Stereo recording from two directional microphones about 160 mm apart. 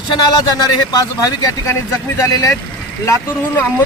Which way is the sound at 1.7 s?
20° left (ahead or behind).